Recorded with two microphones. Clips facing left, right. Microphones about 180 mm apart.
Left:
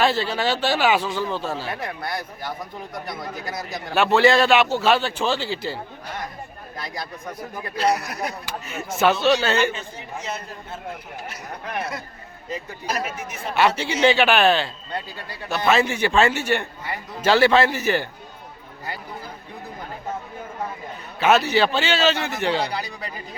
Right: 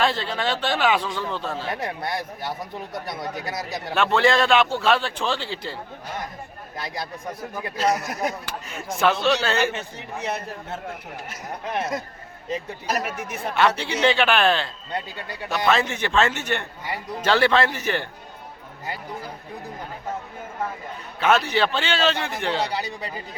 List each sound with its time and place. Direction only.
0.0 s a man's voice: 5° left (ahead or behind)
1.7 s speech: 25° right (ahead or behind)
3.9 s a man's voice: 5° left (ahead or behind)
6.7 s speech: 25° right (ahead or behind)
7.8 s speech: 45° right (ahead or behind)
8.0 s speech: 25° right (ahead or behind)
8.4 s a man's voice: 5° left (ahead or behind)
9.7 s a man's voice: 65° right (ahead or behind)
13.1 s speech: 65° right (ahead or behind)
13.6 s a man's voice: 5° left (ahead or behind)
21.2 s a man's voice: 5° left (ahead or behind)